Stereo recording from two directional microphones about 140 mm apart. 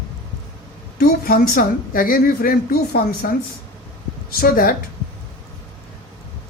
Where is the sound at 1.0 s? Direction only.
90° left.